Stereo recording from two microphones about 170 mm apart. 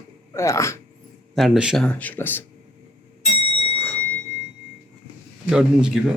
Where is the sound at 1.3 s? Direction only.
Centre (ahead or behind).